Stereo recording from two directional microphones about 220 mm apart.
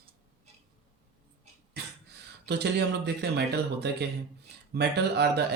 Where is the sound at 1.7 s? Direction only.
50° right (ahead or behind).